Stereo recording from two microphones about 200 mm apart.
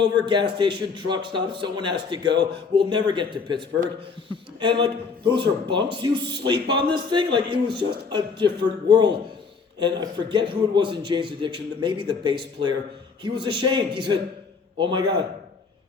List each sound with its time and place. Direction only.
0.0 s a man's voice: 20° right (ahead or behind)